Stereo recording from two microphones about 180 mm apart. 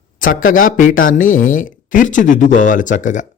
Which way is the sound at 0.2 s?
50° left (ahead or behind).